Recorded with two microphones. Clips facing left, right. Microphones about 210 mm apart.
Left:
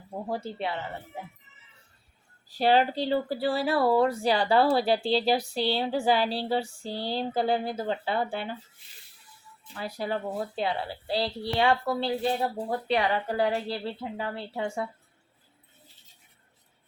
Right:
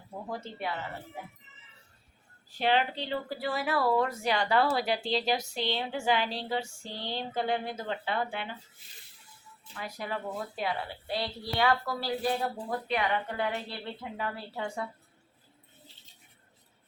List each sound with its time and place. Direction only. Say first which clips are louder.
0.3 s speech: left 4 dB; 30° left (ahead or behind)
2.5 s speech: left 5 dB; 35° left (ahead or behind)
9.7 s speech: left 5 dB; 30° left (ahead or behind)